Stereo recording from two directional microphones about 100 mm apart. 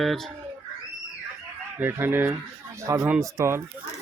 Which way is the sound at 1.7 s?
20° right (ahead or behind).